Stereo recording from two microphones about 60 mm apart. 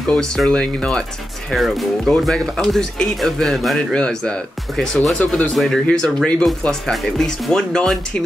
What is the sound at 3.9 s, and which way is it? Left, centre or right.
Speech, centre.